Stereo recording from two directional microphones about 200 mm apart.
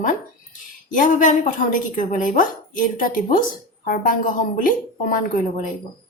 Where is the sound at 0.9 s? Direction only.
40° left (ahead or behind).